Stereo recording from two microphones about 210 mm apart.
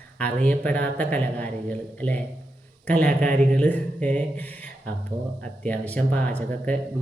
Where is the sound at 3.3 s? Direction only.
40° right (ahead or behind).